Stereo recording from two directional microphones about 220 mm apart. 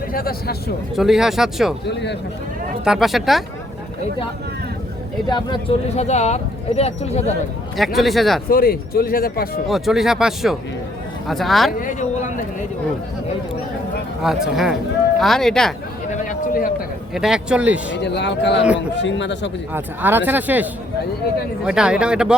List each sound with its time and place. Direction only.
0.1 s speech: 40° left (ahead or behind)
0.9 s speech: centre (ahead or behind)
1.9 s speech: 50° left (ahead or behind)
2.8 s speech: centre (ahead or behind)
5.3 s speech: 20° left (ahead or behind)
7.9 s speech: centre (ahead or behind)
8.4 s speech: 40° left (ahead or behind)
9.6 s speech: centre (ahead or behind)
14.2 s speech: centre (ahead or behind)
16.3 s a man's voice: 40° left (ahead or behind)
17.2 s speech: 5° right (ahead or behind)
18.0 s speech: 50° left (ahead or behind)
19.7 s speech: 10° right (ahead or behind)